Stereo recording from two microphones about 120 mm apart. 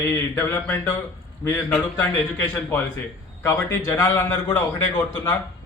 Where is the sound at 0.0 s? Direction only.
25° left (ahead or behind).